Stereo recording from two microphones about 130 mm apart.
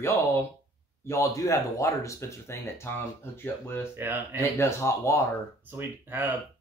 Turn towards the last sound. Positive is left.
turn(degrees=-15)  # may be behind; listen again after turning